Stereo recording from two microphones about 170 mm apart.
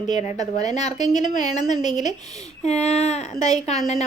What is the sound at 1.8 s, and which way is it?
Speech, 25° right (ahead or behind).